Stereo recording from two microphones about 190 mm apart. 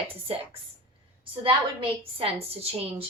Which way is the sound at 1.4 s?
30° right (ahead or behind).